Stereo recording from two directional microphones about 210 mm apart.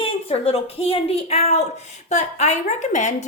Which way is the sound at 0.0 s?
25° left (ahead or behind).